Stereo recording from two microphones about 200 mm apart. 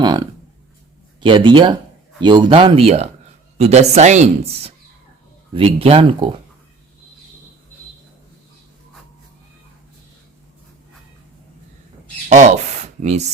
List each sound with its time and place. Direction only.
0.0 s a sound: 20° right (ahead or behind)
1.2 s speech: 25° right (ahead or behind)
12.3 s speech: 35° right (ahead or behind)